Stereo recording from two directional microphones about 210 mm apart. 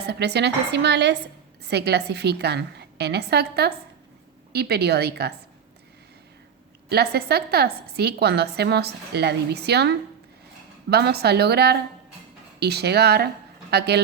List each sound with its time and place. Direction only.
0.0 s a woman's voice: 50° right (ahead or behind)
6.8 s a woman's voice: 50° right (ahead or behind)